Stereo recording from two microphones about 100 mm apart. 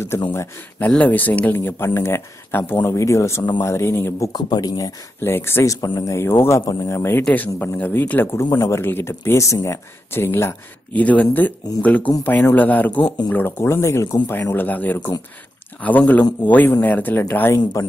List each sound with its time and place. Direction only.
0.7 s speech: 15° left (ahead or behind)
4.3 s speech: 40° left (ahead or behind)
5.2 s speech: 25° left (ahead or behind)
5.8 s speech: 35° left (ahead or behind)